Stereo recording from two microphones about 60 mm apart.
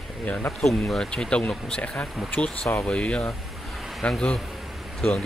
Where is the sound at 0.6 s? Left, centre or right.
Centre.